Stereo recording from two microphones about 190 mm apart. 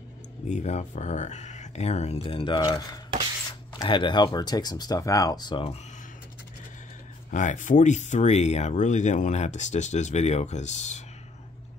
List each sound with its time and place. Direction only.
0.5 s speech: 35° left (ahead or behind)
7.2 s speech: 40° left (ahead or behind)